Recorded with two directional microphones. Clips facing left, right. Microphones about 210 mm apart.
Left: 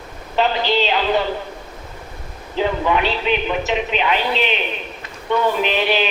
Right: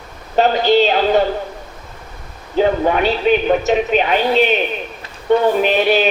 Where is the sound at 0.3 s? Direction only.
45° right (ahead or behind).